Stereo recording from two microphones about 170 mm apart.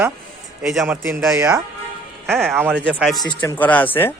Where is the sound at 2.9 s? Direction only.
Centre (ahead or behind).